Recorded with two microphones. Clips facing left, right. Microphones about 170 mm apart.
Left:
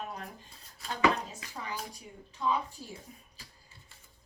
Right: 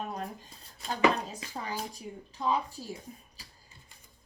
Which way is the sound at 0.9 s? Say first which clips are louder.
Right 2 dB; 35° right (ahead or behind).